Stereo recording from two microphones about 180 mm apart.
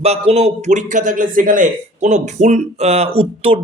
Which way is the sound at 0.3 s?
35° right (ahead or behind).